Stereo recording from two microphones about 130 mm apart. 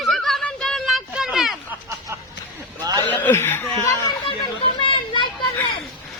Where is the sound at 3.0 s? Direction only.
15° left (ahead or behind).